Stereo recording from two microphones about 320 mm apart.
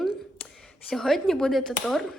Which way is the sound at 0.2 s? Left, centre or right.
Centre.